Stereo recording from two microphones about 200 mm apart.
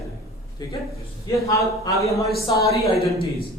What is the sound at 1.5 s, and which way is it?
Speech, 15° left (ahead or behind).